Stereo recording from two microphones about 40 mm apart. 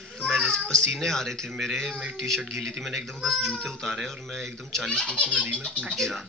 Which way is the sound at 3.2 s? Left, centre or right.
Centre.